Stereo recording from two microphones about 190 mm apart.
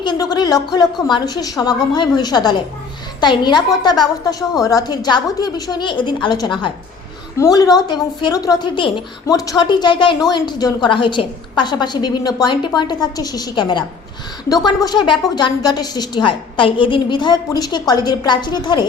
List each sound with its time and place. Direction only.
0.0 s a woman's voice: 20° left (ahead or behind)